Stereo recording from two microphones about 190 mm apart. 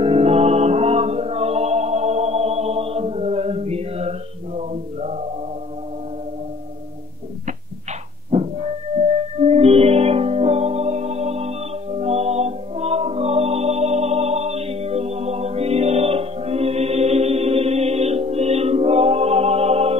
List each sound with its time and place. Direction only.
0.0 s music: 30° right (ahead or behind)
4.6 s male singing: 35° right (ahead or behind)
8.3 s music: 35° right (ahead or behind)